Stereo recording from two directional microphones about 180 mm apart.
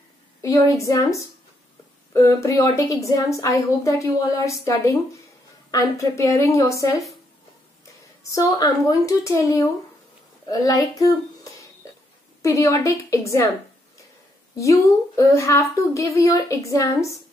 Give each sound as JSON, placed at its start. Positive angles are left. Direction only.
{"t": 0.4, "sound": "speech", "side_deg": 15}
{"t": 5.7, "sound": "speech", "side_deg": 15}
{"t": 8.2, "sound": "speech", "side_deg": 20}
{"t": 12.4, "sound": "speech", "side_deg": 15}
{"t": 14.6, "sound": "speech", "side_deg": 15}